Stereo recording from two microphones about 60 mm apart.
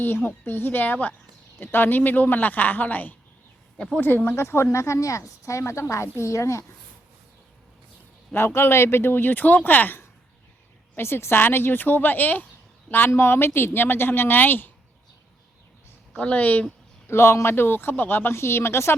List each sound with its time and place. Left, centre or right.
0.0 s a woman's voice: left
4.3 s speech: left
8.3 s a woman's voice: left
10.9 s a woman's voice: left
13.1 s a woman's voice: left
16.1 s speech: left
17.1 s speech: left